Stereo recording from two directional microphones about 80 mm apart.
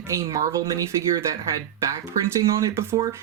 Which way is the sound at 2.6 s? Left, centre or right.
Right.